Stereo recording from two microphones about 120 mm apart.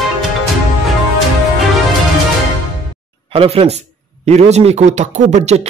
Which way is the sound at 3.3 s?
55° right (ahead or behind).